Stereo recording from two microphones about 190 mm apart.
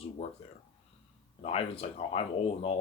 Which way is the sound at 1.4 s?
30° left (ahead or behind).